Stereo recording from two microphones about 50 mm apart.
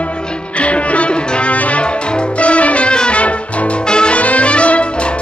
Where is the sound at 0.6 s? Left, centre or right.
Left.